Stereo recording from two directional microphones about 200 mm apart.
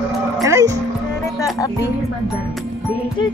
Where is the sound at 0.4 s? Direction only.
15° right (ahead or behind).